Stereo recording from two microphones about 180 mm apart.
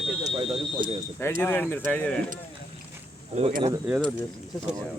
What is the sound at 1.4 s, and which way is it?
Speech, 10° left (ahead or behind).